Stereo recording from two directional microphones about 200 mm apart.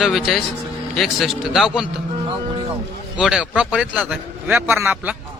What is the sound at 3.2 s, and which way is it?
A man's voice, 5° right (ahead or behind).